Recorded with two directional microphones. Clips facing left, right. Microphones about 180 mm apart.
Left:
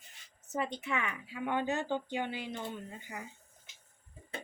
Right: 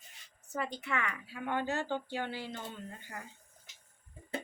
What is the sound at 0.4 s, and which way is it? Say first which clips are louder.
A woman's voice: left 2 dB; 20° left (ahead or behind).